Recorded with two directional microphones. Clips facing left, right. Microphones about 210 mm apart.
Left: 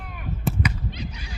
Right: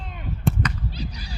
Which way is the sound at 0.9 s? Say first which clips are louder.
Right 1 dB; 35° right (ahead or behind).